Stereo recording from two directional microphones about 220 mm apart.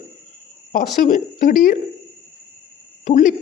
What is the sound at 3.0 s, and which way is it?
Speech, 35° left (ahead or behind).